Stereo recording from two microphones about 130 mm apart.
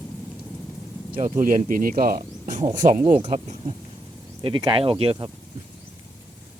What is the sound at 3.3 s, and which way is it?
Speech, 60° right (ahead or behind).